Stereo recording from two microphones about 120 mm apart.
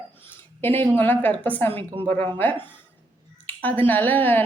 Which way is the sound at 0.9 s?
15° left (ahead or behind).